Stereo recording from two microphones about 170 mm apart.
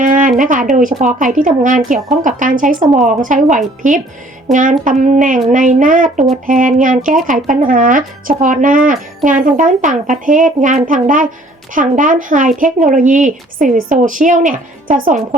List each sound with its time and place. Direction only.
0.0 s speech: 50° right (ahead or behind)
4.5 s speech: centre (ahead or behind)
4.9 s speech: 45° right (ahead or behind)